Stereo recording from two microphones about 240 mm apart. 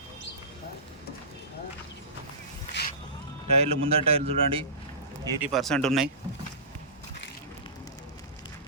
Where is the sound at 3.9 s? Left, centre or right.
Right.